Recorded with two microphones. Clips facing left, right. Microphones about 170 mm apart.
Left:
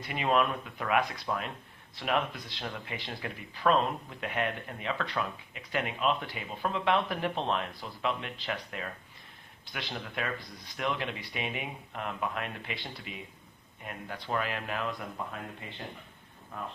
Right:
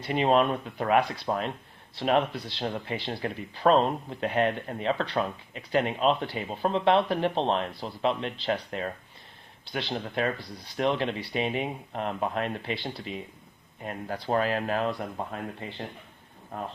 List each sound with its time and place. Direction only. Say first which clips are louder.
0.0 s speech: right 5 dB; 30° right (ahead or behind)